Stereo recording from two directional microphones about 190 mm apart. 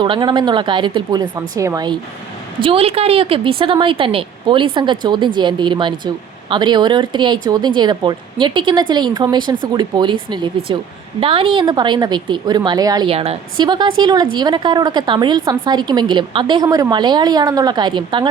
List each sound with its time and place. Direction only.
0.0 s a woman's voice: 25° right (ahead or behind)